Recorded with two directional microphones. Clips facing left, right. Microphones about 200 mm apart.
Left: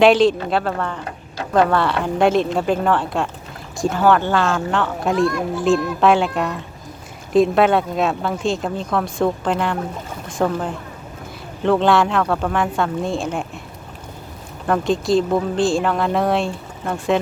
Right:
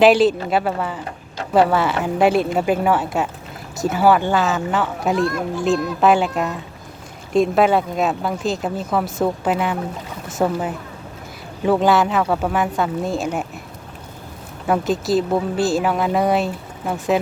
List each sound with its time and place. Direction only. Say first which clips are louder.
0.0 s speech: even; 5° right (ahead or behind)
14.7 s speech: left 1 dB; 5° right (ahead or behind)